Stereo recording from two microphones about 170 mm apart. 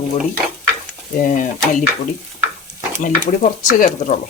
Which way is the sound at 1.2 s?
50° left (ahead or behind).